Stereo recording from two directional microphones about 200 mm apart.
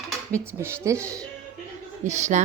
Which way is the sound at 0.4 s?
10° right (ahead or behind).